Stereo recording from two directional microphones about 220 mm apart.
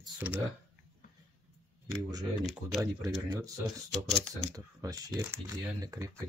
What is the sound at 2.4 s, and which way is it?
Speech, centre (ahead or behind).